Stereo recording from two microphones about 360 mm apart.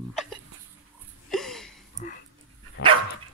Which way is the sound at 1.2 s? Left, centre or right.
Centre.